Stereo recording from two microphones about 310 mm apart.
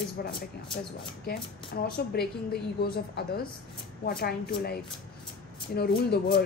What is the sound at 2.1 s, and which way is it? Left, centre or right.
A woman's voice, left.